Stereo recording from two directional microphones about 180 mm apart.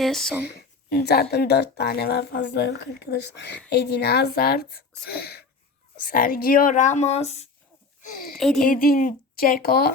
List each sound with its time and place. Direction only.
0.0 s speech: centre (ahead or behind)
0.5 s speech: 60° left (ahead or behind)
6.0 s speech: 50° left (ahead or behind)
8.0 s speech: 50° left (ahead or behind)
8.4 s speech: centre (ahead or behind)
8.6 s speech: 50° left (ahead or behind)